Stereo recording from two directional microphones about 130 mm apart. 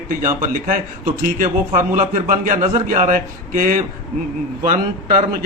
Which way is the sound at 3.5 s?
90° right.